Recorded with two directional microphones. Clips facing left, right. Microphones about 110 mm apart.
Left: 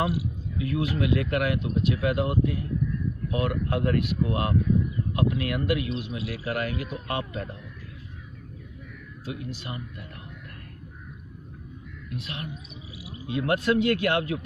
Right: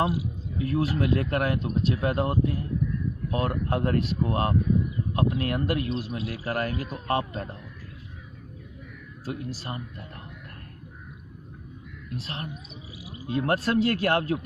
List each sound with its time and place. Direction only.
0.6 s a man's voice: 35° right (ahead or behind)
9.2 s a man's voice: 35° right (ahead or behind)
12.2 s a man's voice: 35° right (ahead or behind)